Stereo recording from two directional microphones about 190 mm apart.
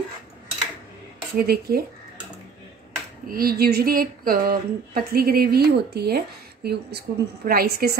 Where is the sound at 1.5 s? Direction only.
55° right (ahead or behind).